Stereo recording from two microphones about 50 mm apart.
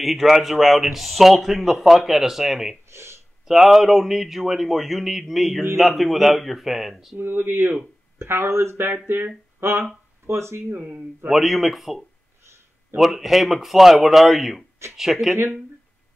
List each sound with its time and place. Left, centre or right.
0.0 s speech: centre
2.9 s a sound: right
3.4 s speech: centre
7.2 s speech: right
9.6 s speech: right
11.2 s speech: centre